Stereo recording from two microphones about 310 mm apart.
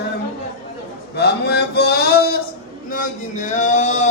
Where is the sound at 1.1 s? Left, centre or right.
Left.